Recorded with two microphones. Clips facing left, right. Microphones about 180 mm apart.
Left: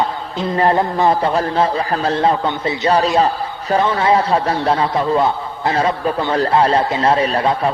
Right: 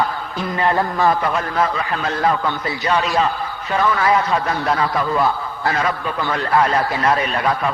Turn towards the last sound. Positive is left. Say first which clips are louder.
# left 3 dB
turn(degrees=30)  # may be behind; listen again after turning